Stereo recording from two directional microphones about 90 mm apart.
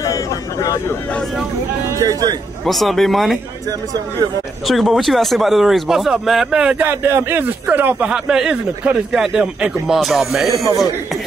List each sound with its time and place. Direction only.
0.0 s a sound: 40° left (ahead or behind)
1.9 s speech: 40° right (ahead or behind)
2.6 s speech: centre (ahead or behind)
4.6 s speech: centre (ahead or behind)
6.9 s speech: 25° right (ahead or behind); by 10.5 s centre (ahead or behind)